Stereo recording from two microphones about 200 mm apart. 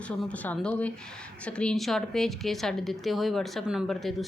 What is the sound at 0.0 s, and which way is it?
Speech, 5° left (ahead or behind).